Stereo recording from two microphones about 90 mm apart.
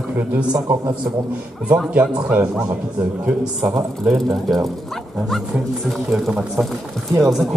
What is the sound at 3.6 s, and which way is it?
Speech, 35° right (ahead or behind).